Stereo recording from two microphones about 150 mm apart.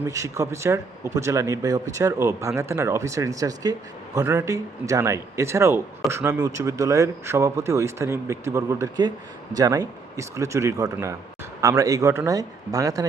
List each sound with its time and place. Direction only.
0.0 s speech: 20° right (ahead or behind)